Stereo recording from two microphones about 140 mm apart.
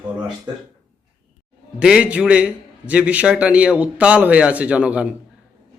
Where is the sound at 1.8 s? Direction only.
10° right (ahead or behind).